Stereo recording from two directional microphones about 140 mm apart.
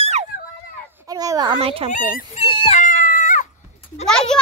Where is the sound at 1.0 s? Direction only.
25° right (ahead or behind).